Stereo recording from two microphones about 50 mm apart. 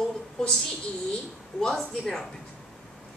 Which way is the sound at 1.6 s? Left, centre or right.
Centre.